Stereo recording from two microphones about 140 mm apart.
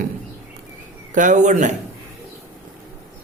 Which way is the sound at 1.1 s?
65° right (ahead or behind).